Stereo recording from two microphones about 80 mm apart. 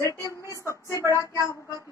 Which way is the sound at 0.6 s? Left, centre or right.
Left.